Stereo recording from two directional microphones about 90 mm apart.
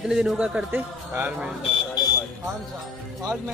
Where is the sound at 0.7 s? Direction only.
20° right (ahead or behind).